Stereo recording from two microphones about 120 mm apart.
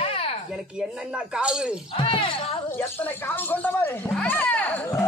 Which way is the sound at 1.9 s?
45° left (ahead or behind).